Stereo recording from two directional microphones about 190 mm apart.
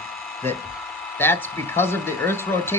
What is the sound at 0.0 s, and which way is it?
Speech, centre (ahead or behind).